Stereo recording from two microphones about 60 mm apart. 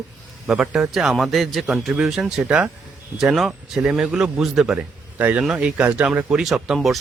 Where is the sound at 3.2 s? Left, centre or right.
Centre.